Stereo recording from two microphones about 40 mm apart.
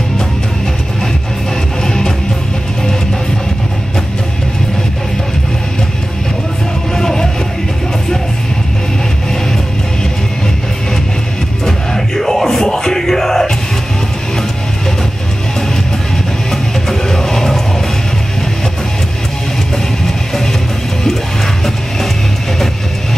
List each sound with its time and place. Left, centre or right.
1.8 s music: centre
7.0 s music: centre
11.6 s music: centre
16.9 s music: centre